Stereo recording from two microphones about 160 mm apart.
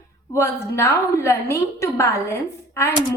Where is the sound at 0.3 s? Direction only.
15° left (ahead or behind).